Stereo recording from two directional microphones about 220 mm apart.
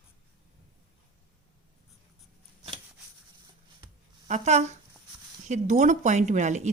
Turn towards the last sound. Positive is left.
turn(degrees=-35)  # may be behind; listen again after turning